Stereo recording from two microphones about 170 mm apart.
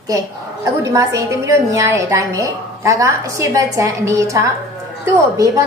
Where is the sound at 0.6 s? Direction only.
20° right (ahead or behind).